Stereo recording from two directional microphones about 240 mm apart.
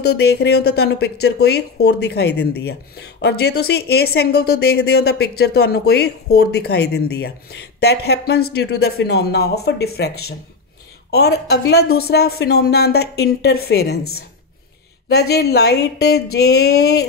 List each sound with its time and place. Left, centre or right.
0.0 s speech: left
15.0 s speech: left